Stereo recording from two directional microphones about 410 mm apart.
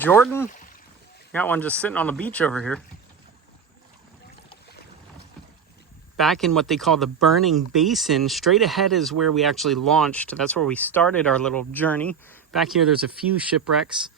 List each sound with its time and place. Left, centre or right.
0.0 s speech: centre
6.1 s speech: centre